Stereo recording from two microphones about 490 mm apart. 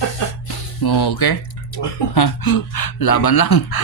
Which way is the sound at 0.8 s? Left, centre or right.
Left.